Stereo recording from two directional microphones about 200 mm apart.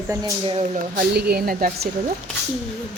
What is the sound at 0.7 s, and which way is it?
Speech, 50° right (ahead or behind).